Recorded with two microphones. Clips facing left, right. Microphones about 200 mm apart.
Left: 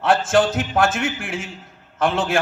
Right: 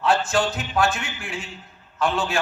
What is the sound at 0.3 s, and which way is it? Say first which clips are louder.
A man's voice: left 6 dB; 50° left (ahead or behind).